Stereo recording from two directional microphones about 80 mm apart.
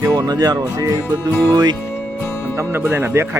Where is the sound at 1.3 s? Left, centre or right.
Left.